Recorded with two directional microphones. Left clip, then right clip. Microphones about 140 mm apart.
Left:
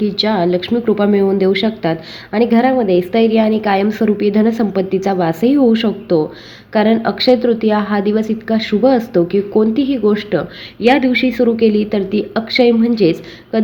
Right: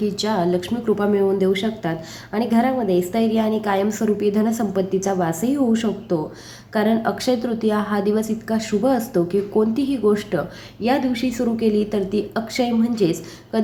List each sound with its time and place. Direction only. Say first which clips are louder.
0.0 s a woman's voice: left 6 dB; 20° left (ahead or behind)